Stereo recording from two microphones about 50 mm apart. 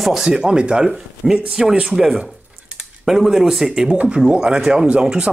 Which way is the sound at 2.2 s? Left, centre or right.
Centre.